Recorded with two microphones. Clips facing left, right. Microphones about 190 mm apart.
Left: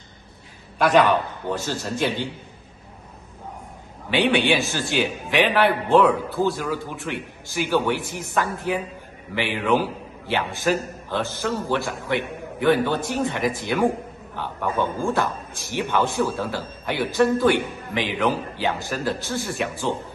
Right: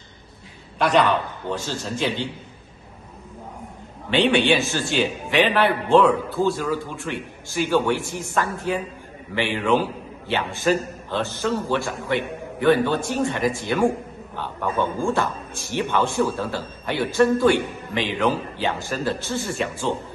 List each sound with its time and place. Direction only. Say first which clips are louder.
0.7 s a man's voice: left 1 dB; 10° left (ahead or behind)
4.1 s a man's voice: right 1 dB; 15° left (ahead or behind)
15.0 s a man's voice: even; 15° left (ahead or behind)
19.2 s a man's voice: right 1 dB; 15° right (ahead or behind)